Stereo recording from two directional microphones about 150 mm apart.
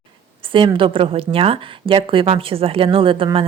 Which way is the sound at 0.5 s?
35° right (ahead or behind).